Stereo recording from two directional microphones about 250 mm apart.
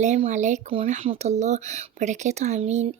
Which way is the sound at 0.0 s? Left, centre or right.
Right.